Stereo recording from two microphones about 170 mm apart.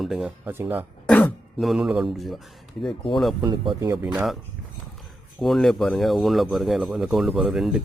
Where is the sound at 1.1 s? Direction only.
5° left (ahead or behind).